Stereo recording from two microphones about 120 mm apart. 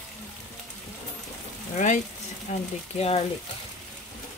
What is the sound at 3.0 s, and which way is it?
Speech, 55° left (ahead or behind).